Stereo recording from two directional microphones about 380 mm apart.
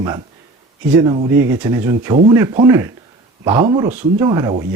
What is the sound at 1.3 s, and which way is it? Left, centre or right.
Speech, centre.